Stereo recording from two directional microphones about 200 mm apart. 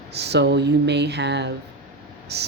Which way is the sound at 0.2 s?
55° right (ahead or behind).